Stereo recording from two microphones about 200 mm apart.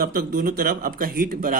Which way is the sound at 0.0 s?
45° right (ahead or behind).